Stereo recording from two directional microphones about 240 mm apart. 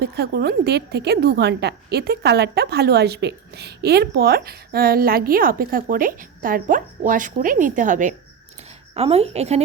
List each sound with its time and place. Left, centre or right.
0.0 s a woman's voice: right